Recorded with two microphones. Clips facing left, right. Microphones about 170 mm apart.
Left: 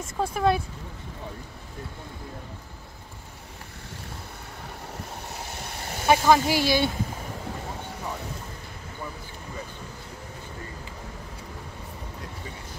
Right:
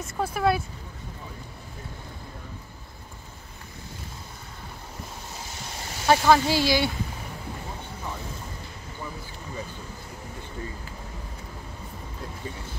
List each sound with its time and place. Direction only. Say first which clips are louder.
0.2 s speech: left 1 dB; 5° right (ahead or behind)
5.3 s boat: left 2 dB; 60° left (ahead or behind)
6.0 s speech: even; 15° left (ahead or behind)